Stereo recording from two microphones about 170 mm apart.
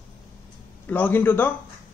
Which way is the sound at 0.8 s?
10° left (ahead or behind).